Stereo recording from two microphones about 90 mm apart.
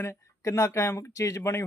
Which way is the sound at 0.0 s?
30° left (ahead or behind).